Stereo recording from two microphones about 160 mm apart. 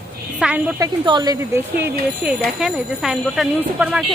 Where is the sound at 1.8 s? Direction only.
5° right (ahead or behind).